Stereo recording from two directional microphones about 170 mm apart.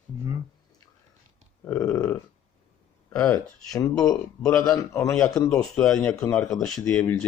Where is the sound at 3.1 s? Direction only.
20° left (ahead or behind).